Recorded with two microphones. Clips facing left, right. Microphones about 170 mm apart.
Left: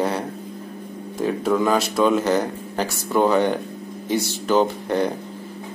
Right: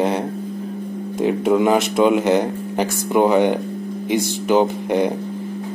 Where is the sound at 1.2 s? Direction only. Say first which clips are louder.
Right 4 dB; 20° right (ahead or behind).